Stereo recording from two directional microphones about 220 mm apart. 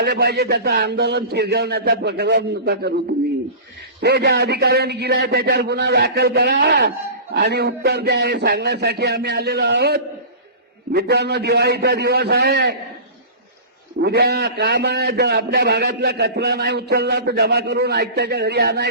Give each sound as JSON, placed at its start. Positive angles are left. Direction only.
{"t": 0.0, "sound": "a man's voice", "side_deg": -45}
{"t": 4.0, "sound": "a man's voice", "side_deg": -50}
{"t": 14.0, "sound": "a man's voice", "side_deg": -50}